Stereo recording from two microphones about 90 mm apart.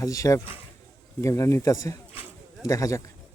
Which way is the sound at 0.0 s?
40° left (ahead or behind).